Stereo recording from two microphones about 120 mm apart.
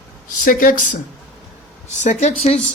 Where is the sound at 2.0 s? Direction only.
85° left; by 2.6 s 65° left (ahead or behind).